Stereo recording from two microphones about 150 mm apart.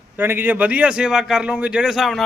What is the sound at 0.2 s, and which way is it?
A man's voice, 15° right (ahead or behind).